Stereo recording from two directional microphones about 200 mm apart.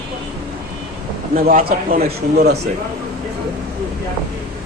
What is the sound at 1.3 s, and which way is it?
A man's voice, 45° right (ahead or behind).